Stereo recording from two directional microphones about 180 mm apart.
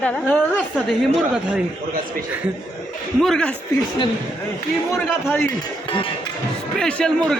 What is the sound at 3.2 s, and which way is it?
Speech, 5° left (ahead or behind).